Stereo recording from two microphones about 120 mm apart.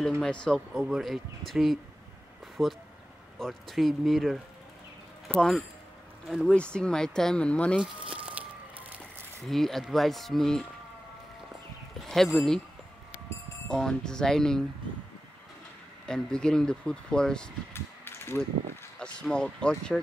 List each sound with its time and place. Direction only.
0.2 s speech: 5° left (ahead or behind)
0.7 s speech: 5° right (ahead or behind)
7.8 s a sound: 10° right (ahead or behind)
9.5 s speech: centre (ahead or behind)
12.0 s speech: centre (ahead or behind)
13.7 s speech: 5° left (ahead or behind)
16.1 s speech: 5° left (ahead or behind)
17.7 s mechanisms: 20° left (ahead or behind)
18.9 s speech: 5° left (ahead or behind)